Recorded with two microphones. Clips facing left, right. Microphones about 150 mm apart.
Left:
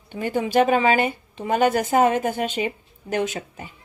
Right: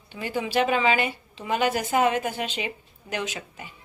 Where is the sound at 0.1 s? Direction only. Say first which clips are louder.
Left 5 dB; 50° left (ahead or behind).